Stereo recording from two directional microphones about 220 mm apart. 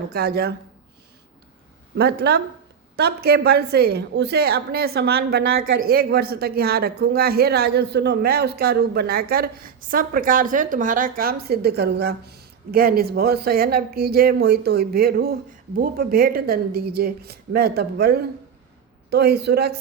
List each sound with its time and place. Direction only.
0.1 s a woman's voice: 45° right (ahead or behind)
2.0 s a woman's voice: 45° right (ahead or behind)